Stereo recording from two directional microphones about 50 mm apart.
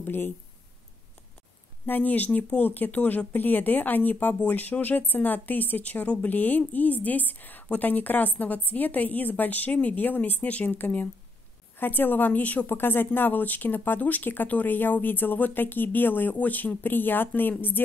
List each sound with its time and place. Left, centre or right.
0.0 s speech: left
1.9 s speech: left
12.7 s speech: left